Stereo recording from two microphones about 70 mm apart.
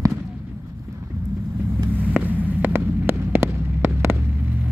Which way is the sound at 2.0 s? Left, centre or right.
Right.